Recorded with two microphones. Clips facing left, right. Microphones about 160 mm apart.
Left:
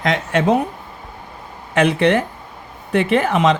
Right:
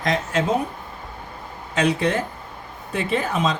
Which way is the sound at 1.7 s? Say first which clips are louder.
Left 6 dB; 65° left (ahead or behind).